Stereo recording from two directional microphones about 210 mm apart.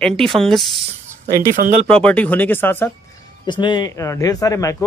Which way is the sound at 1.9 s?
5° left (ahead or behind).